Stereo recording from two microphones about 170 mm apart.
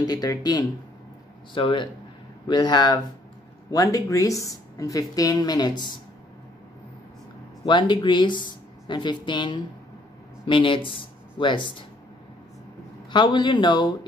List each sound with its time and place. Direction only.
0.0 s speech: 20° left (ahead or behind)
7.6 s speech: 25° left (ahead or behind)
13.1 s speech: 25° left (ahead or behind)